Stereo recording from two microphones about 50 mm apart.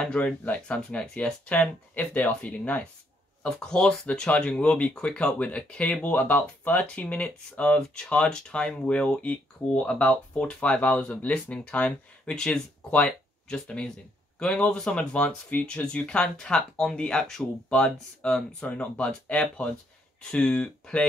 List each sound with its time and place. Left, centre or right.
0.0 s speech: left
0.7 s speech: left
3.4 s speech: centre
17.6 s speech: left
18.7 s speech: left